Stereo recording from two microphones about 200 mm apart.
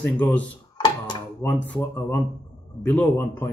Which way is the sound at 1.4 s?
10° left (ahead or behind).